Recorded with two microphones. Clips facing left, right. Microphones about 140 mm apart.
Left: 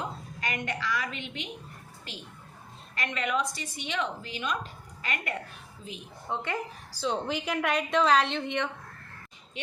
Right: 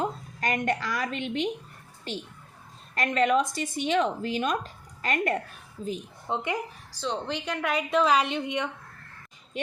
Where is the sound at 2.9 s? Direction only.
45° right (ahead or behind).